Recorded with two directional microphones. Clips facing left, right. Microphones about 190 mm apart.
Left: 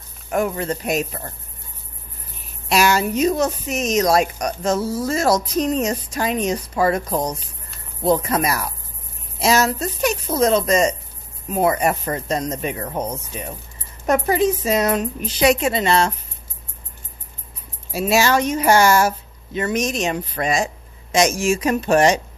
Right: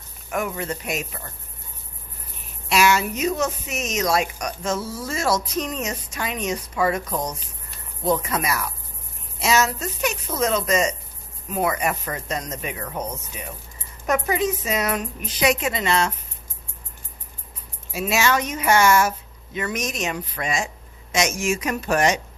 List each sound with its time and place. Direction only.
0.3 s speech: 35° left (ahead or behind)
2.6 s speech: 40° left (ahead or behind)
17.9 s speech: 35° left (ahead or behind)